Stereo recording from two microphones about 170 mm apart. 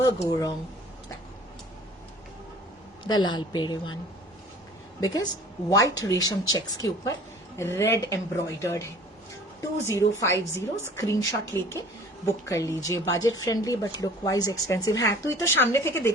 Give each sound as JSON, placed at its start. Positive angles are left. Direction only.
{"t": 0.3, "sound": "a woman's voice", "side_deg": 20}
{"t": 3.1, "sound": "a woman's voice", "side_deg": 25}
{"t": 4.9, "sound": "a woman's voice", "side_deg": 20}